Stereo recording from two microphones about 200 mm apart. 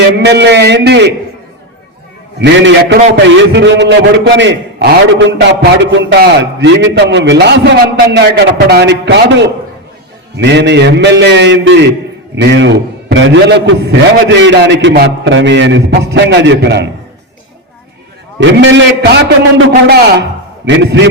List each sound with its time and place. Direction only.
0.2 s a man's voice: 55° right (ahead or behind)
2.4 s a man's voice: 65° right (ahead or behind)
18.3 s a man's voice: 65° right (ahead or behind)